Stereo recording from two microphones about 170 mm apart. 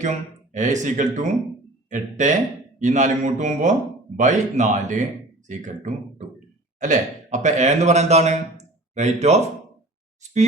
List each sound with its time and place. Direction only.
0.0 s a man's voice: 45° right (ahead or behind)